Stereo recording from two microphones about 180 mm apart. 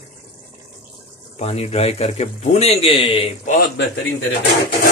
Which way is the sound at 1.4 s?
35° left (ahead or behind).